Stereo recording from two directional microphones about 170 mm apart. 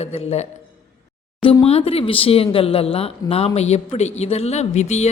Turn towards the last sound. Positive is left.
turn(degrees=40)  # may be behind; listen again after turning